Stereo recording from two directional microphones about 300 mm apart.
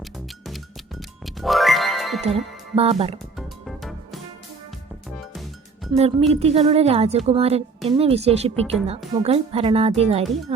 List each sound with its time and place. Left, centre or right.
0.0 s music: centre
2.2 s speech: centre
3.3 s music: centre
6.0 s speech: centre